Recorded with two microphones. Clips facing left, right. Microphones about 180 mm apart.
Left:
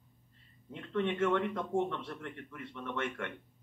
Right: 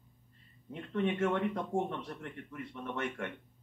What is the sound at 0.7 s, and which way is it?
Speech, 15° right (ahead or behind).